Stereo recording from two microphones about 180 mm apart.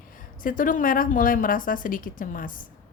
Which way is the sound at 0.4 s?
50° left (ahead or behind).